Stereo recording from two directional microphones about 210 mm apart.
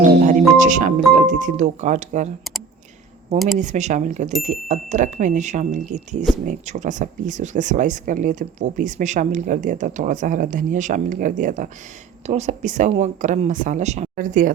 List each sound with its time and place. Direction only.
0.0 s speech: 35° right (ahead or behind)
3.3 s speech: centre (ahead or behind)
3.6 s speech: 35° right (ahead or behind)